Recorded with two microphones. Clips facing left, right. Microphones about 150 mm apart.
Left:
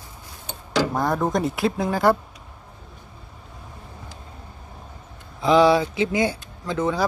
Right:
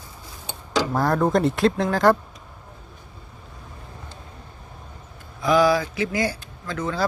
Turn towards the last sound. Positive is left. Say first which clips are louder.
# left 3 dB
turn(degrees=20)  # may be behind; listen again after turning